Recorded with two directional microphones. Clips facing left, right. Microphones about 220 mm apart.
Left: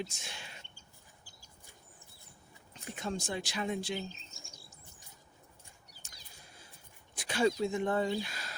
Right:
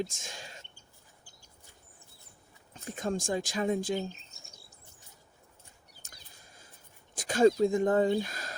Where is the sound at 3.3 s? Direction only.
40° right (ahead or behind).